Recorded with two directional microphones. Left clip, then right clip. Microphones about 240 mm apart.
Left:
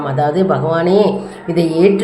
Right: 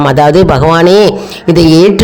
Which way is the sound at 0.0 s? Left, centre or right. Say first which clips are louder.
Right 10 dB; right.